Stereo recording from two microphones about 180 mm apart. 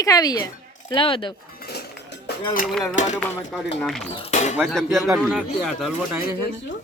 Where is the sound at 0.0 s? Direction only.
20° left (ahead or behind).